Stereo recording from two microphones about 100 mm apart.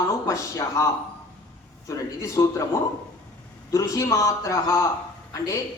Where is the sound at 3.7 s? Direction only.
35° left (ahead or behind).